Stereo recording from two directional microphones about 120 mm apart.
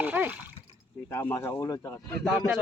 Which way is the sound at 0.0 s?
15° right (ahead or behind).